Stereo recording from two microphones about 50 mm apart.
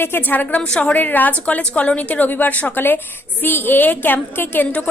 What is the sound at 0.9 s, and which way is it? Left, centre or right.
A woman's voice, left.